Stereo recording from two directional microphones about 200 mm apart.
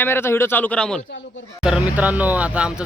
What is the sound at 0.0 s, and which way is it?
A man's voice, 10° left (ahead or behind).